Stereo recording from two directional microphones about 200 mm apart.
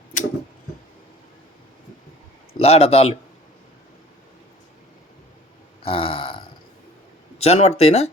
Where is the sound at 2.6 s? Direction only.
30° left (ahead or behind).